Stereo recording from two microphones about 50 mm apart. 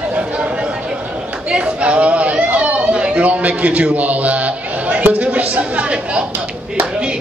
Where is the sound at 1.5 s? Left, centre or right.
Right.